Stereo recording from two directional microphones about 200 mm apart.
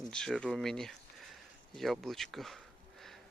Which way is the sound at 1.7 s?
Centre (ahead or behind).